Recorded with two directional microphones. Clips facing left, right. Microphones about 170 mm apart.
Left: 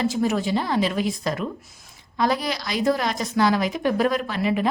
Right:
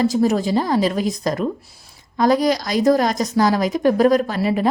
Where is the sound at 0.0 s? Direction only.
40° right (ahead or behind).